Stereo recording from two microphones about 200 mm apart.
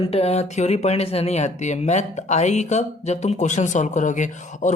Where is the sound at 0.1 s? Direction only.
30° left (ahead or behind).